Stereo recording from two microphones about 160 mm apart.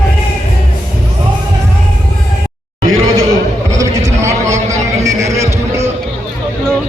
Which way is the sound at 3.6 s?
20° right (ahead or behind).